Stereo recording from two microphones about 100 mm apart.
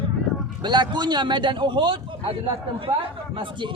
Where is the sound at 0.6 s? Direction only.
50° right (ahead or behind).